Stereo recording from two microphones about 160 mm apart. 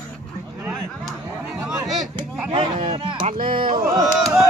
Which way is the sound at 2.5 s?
35° right (ahead or behind).